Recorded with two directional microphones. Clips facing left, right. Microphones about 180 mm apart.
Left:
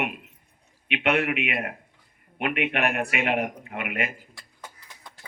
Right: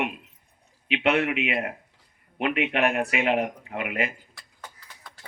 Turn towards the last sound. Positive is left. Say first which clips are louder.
# right 2 dB
turn(degrees=-30)  # may be behind; listen again after turning